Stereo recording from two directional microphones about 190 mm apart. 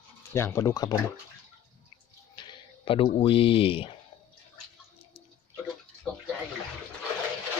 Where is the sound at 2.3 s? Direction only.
25° left (ahead or behind).